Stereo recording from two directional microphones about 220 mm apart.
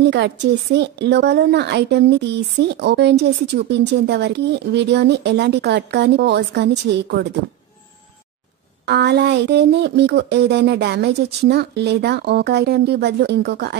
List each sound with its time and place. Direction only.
0.0 s speech: 50° right (ahead or behind)
8.8 s speech: 50° right (ahead or behind)